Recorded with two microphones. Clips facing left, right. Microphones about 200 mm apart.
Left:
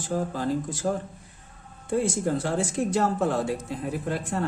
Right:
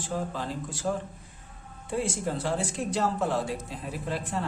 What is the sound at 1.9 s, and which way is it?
Speech, 45° left (ahead or behind).